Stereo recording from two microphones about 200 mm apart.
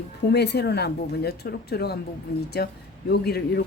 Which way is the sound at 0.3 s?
55° left (ahead or behind).